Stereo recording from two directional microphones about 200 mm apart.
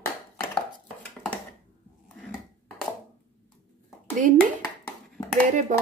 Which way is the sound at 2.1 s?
5° left (ahead or behind).